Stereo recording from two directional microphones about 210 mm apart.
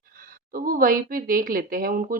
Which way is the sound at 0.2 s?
40° right (ahead or behind).